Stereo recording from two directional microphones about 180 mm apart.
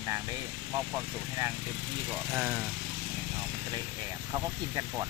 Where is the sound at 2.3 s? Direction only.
Centre (ahead or behind).